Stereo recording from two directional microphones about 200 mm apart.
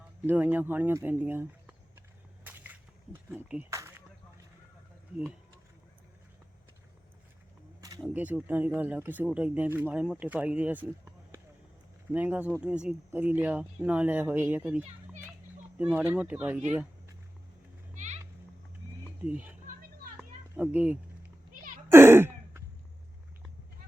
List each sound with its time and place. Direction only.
0.3 s speech: 10° right (ahead or behind)
2.4 s whip: 10° right (ahead or behind)
3.2 s speech: 10° right (ahead or behind)
7.8 s single-lens reflex camera: 20° right (ahead or behind)
8.1 s speech: 5° right (ahead or behind)
12.1 s speech: 10° right (ahead or behind)
17.9 s children playing: 35° right (ahead or behind)
19.2 s speech: 10° right (ahead or behind)
20.6 s speech: 5° right (ahead or behind)
21.8 s a sound: 10° right (ahead or behind)